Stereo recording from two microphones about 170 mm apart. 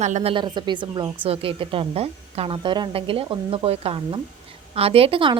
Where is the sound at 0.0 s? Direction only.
40° right (ahead or behind).